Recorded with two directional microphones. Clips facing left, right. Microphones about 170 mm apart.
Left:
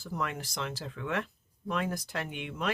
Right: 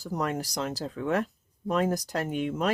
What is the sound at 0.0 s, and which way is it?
Speech, 40° right (ahead or behind).